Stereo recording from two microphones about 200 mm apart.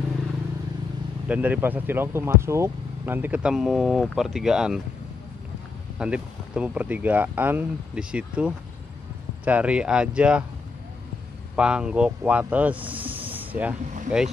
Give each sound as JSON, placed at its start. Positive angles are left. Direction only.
{"t": 1.3, "sound": "speech", "side_deg": -5}
{"t": 5.9, "sound": "speech", "side_deg": -5}
{"t": 11.5, "sound": "speech", "side_deg": -5}
{"t": 13.1, "sound": "a sound", "side_deg": -25}
{"t": 13.4, "sound": "vehicle", "side_deg": -10}
{"t": 14.1, "sound": "speech", "side_deg": -5}